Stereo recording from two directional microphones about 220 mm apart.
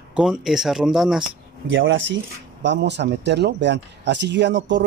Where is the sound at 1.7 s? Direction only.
55° right (ahead or behind).